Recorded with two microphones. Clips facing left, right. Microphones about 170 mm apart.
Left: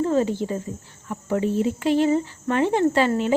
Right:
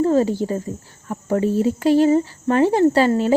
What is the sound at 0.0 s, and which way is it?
Cricket, 40° right (ahead or behind).